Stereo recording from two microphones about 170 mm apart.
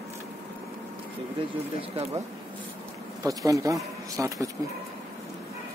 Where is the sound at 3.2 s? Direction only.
20° right (ahead or behind).